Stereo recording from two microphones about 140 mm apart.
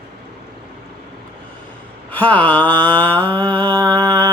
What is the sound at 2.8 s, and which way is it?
Mantra, 10° left (ahead or behind).